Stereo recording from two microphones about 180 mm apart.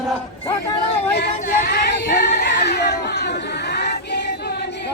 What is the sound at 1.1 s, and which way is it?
Child singing, 65° left (ahead or behind).